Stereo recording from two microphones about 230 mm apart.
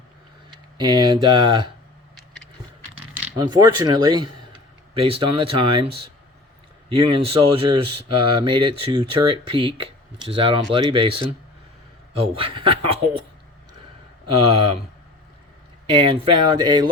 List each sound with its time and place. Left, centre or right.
0.5 s speech: centre
3.3 s speech: centre
6.9 s speech: right
12.3 s speech: right
15.9 s speech: right